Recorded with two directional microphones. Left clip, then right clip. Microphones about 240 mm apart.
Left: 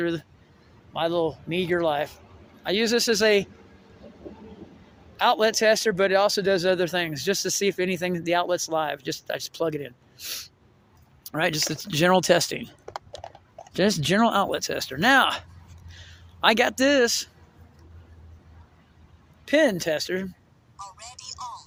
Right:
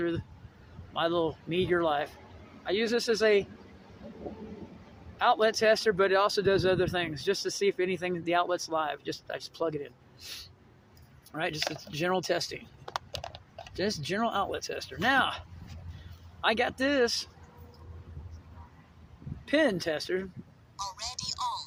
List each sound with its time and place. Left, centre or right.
0.9 s speech: left
2.6 s speech: left
5.1 s speech: left
12.8 s typing: centre
13.7 s speech: left
19.5 s speech: left
20.7 s a sound: centre